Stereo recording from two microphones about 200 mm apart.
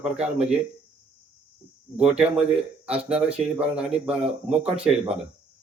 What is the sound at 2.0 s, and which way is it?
Speech, 5° right (ahead or behind).